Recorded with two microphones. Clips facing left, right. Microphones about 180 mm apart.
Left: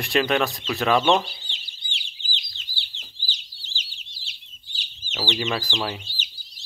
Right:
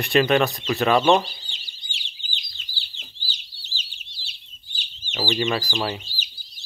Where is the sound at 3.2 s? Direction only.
90° left.